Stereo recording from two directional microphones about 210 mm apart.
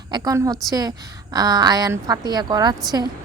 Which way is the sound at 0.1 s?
15° right (ahead or behind).